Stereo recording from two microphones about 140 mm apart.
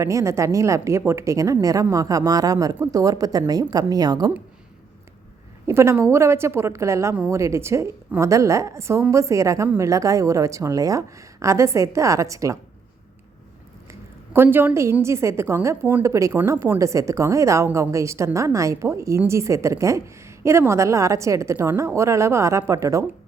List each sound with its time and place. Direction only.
0.0 s a woman's voice: 20° right (ahead or behind)
5.6 s a woman's voice: 20° right (ahead or behind)
14.3 s a woman's voice: 15° right (ahead or behind)